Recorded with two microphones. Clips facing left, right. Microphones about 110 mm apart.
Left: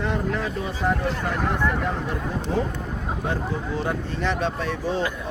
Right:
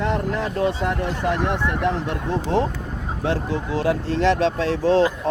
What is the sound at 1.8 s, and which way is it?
Speech, 75° right (ahead or behind).